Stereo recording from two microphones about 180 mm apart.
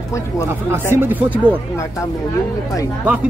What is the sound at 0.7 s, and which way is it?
Speech, 10° right (ahead or behind).